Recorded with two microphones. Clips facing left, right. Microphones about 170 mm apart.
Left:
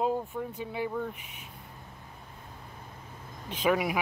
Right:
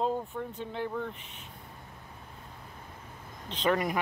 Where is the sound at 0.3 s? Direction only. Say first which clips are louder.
Left 2 dB; 5° left (ahead or behind).